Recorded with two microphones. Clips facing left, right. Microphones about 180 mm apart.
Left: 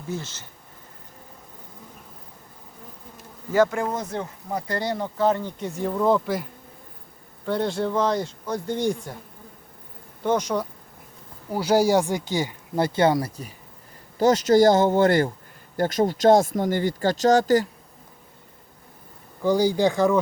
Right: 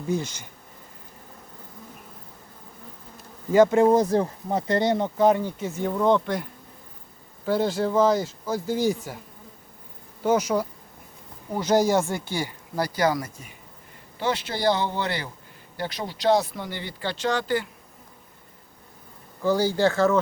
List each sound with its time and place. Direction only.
0.1 s speech: 15° right (ahead or behind)
3.5 s speech: 20° right (ahead or behind); by 9.1 s 5° right (ahead or behind)
10.2 s speech: 5° right (ahead or behind)
11.5 s speech: 10° left (ahead or behind); by 17.7 s 40° left (ahead or behind)
19.4 s speech: 15° left (ahead or behind)